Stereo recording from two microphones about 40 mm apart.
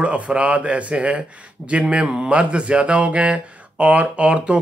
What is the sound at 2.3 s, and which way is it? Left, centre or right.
A man's voice, right.